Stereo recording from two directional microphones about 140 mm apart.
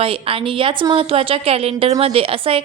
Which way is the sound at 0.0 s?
40° right (ahead or behind).